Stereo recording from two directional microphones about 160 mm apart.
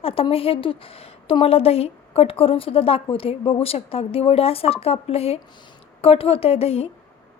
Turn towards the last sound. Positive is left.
turn(degrees=40)  # may be behind; listen again after turning